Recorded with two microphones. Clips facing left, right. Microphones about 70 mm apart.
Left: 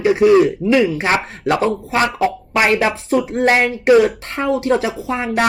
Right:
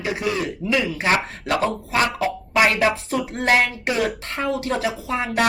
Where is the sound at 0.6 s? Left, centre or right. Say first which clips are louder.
Left 7 dB; left.